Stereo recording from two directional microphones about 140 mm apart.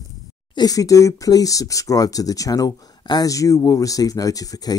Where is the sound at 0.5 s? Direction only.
25° left (ahead or behind).